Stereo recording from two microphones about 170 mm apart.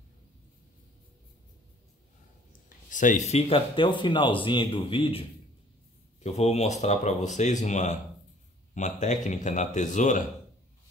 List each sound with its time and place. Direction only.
2.9 s speech: 50° left (ahead or behind); by 5.2 s 35° left (ahead or behind)
6.2 s speech: 40° left (ahead or behind)